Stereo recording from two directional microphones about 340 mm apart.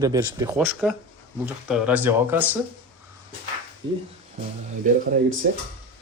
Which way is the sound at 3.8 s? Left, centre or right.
Centre.